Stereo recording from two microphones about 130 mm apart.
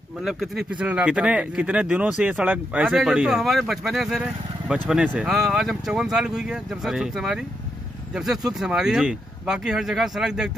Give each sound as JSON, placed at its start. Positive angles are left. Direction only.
{"t": 0.2, "sound": "speech", "side_deg": -5}